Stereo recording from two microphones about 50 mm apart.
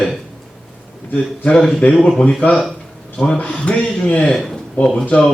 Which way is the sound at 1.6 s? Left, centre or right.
Centre.